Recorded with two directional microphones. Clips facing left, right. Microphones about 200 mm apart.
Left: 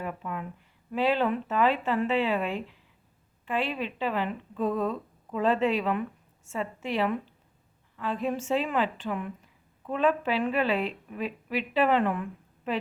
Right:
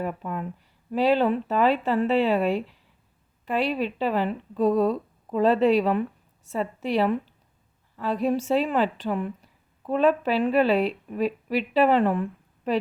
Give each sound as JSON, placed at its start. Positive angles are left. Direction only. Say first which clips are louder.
{"t": 0.0, "sound": "a woman's voice", "louder": "right 5 dB", "side_deg": -40}